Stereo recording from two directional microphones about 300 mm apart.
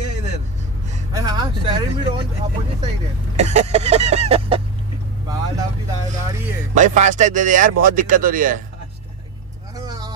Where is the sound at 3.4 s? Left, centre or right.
Right.